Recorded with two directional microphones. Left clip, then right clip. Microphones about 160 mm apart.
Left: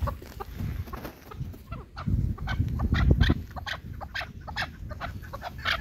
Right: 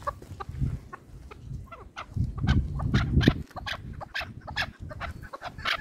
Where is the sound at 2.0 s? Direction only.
30° right (ahead or behind).